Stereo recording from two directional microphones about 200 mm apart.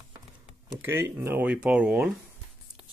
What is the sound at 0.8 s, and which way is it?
Speech, 10° right (ahead or behind).